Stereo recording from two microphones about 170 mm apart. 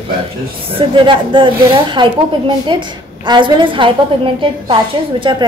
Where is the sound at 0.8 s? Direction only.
30° right (ahead or behind).